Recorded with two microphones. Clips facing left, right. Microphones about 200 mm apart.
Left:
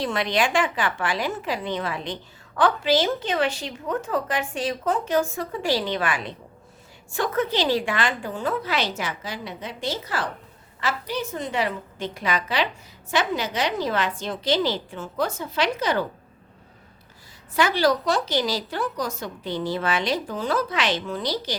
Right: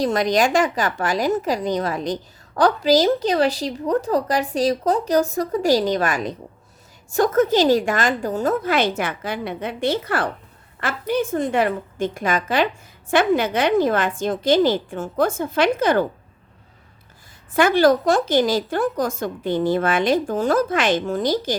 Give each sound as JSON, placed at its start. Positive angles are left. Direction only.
{"t": 0.0, "sound": "a woman's voice", "side_deg": -40}
{"t": 17.5, "sound": "a woman's voice", "side_deg": -50}